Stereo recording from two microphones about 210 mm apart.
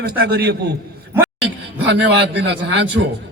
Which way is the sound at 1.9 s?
55° right (ahead or behind).